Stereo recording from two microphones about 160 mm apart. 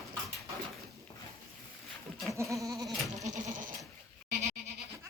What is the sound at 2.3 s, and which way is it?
Goat, 20° right (ahead or behind).